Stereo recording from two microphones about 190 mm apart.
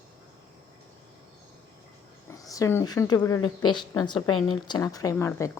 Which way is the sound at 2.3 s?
20° left (ahead or behind).